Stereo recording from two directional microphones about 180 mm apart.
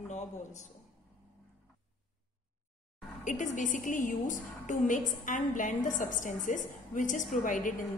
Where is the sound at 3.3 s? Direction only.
45° left (ahead or behind).